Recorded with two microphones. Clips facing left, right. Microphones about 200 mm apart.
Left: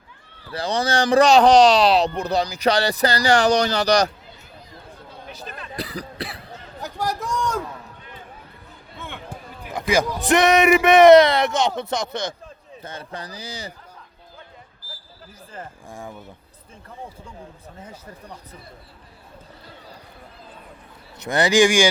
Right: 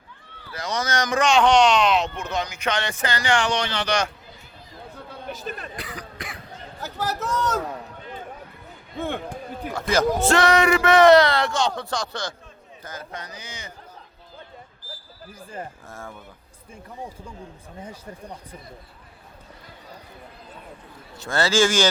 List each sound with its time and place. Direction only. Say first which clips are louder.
0.5 s speech: left 4 dB; 35° left (ahead or behind)
5.2 s a sound: right 4 dB; 50° right (ahead or behind)
5.7 s cough: left 5 dB; 35° left (ahead or behind)
7.0 s a man's voice: even; 15° left (ahead or behind)
9.0 s speech: right 9 dB; 50° right (ahead or behind)
9.9 s speech: left 2 dB; centre (ahead or behind)
10.2 s speech: left 5 dB; 20° left (ahead or behind); by 13.7 s 35° left (ahead or behind)
15.9 s a man's voice: left 3 dB; 15° left (ahead or behind)
21.2 s a man's voice: left 4 dB; 20° left (ahead or behind)